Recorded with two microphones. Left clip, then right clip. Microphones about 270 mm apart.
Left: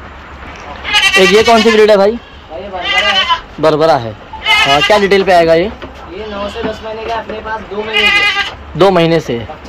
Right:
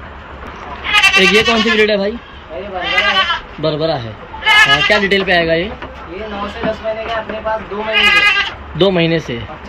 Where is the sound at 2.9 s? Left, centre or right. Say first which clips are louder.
Left 2 dB; centre.